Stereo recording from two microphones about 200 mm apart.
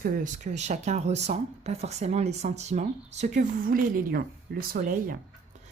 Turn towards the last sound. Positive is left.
turn(degrees=-45)  # may be behind; listen again after turning